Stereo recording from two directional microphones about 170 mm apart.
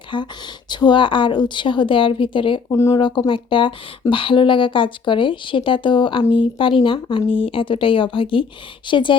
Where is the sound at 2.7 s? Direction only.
20° left (ahead or behind).